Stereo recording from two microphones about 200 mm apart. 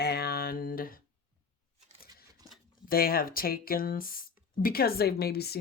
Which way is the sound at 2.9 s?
45° left (ahead or behind).